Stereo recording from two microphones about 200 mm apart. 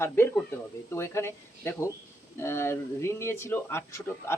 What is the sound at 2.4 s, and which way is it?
A man's voice, 10° left (ahead or behind).